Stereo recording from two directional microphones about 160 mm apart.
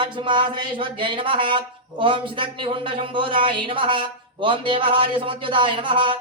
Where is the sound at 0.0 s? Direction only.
30° right (ahead or behind).